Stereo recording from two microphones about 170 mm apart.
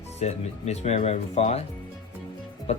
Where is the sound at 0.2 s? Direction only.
40° left (ahead or behind).